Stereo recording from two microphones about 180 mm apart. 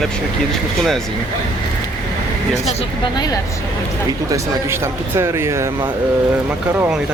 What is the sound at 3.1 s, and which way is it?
Speech, 20° left (ahead or behind).